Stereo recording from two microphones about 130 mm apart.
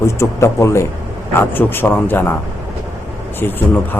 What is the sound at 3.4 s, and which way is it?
Speech, 15° left (ahead or behind).